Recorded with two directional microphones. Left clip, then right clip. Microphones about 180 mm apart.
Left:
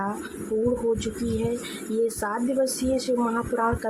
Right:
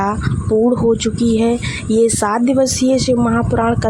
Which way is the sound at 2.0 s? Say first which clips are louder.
Right 11 dB; 40° right (ahead or behind).